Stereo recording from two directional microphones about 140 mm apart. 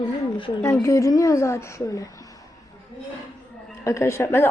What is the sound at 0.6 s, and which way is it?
A woman's voice, 25° left (ahead or behind).